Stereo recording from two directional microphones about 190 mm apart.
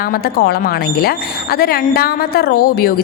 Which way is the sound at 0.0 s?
50° left (ahead or behind).